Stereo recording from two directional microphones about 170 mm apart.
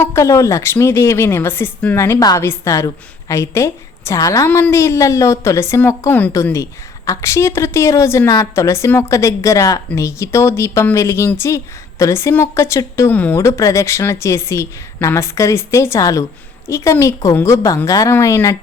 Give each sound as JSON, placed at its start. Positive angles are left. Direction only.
{"t": 0.0, "sound": "a woman's voice", "side_deg": 15}